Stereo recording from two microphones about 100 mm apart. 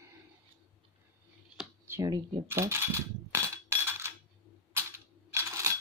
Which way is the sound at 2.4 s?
25° right (ahead or behind).